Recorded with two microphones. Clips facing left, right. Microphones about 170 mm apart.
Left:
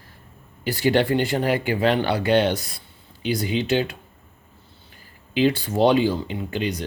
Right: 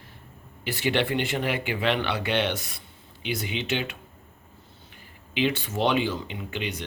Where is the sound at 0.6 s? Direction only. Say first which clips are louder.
Left 6 dB; 35° left (ahead or behind).